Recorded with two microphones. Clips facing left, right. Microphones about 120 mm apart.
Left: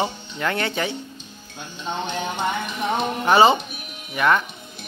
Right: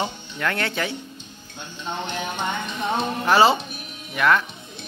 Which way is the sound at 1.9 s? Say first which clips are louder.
Left 2 dB; 15° left (ahead or behind).